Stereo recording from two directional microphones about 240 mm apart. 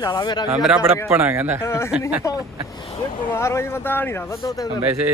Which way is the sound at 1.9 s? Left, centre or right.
Centre.